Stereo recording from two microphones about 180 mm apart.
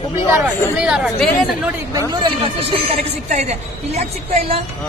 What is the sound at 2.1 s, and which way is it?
A woman's voice, 30° right (ahead or behind).